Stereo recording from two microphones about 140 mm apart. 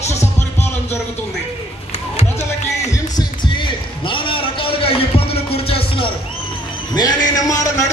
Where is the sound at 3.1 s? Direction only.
35° left (ahead or behind).